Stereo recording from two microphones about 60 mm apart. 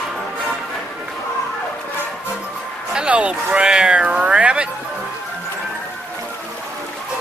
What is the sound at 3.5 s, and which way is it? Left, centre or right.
Cat, centre.